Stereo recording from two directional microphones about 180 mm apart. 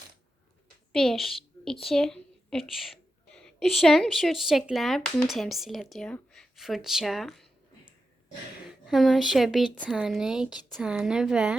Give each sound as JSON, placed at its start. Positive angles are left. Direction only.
{"t": 0.9, "sound": "a woman's voice", "side_deg": 0}
{"t": 8.9, "sound": "speech", "side_deg": 0}